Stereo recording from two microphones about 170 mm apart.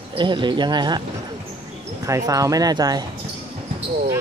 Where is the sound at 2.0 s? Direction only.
20° right (ahead or behind).